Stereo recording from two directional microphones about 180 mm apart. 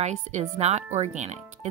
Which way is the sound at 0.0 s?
40° right (ahead or behind).